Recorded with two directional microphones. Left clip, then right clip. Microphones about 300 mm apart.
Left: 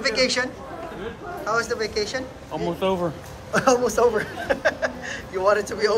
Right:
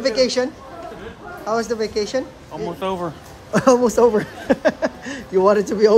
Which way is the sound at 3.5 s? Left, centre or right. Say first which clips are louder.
Right 4 dB; right.